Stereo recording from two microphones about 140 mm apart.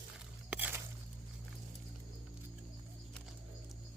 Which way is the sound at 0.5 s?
10° right (ahead or behind).